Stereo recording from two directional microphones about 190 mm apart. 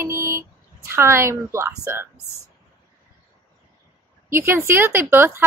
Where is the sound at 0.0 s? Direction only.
15° right (ahead or behind).